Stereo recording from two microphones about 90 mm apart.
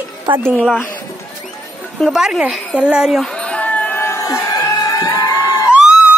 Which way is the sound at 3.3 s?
10° left (ahead or behind).